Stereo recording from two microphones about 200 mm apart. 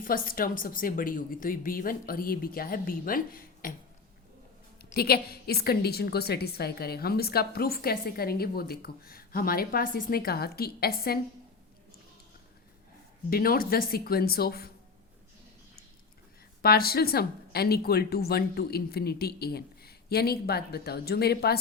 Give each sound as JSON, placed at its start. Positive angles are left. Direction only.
{"t": 0.0, "sound": "a woman's voice", "side_deg": 45}
{"t": 4.9, "sound": "a woman's voice", "side_deg": 50}
{"t": 13.3, "sound": "a woman's voice", "side_deg": 45}
{"t": 16.6, "sound": "a woman's voice", "side_deg": 50}